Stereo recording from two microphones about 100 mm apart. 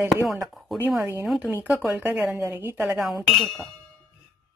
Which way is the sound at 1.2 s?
10° right (ahead or behind).